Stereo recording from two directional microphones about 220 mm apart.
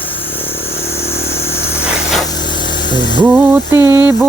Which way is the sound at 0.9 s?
10° left (ahead or behind).